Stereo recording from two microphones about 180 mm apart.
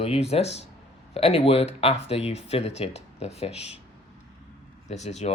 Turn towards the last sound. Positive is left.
turn(degrees=40)  # may be behind; listen again after turning